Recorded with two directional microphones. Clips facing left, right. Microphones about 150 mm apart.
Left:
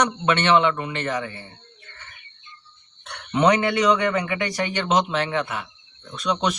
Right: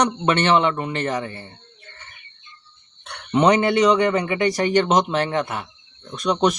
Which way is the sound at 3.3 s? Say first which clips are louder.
Right 3 dB; 30° right (ahead or behind).